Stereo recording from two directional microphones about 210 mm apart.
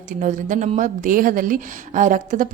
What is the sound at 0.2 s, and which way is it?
Speech, 35° right (ahead or behind).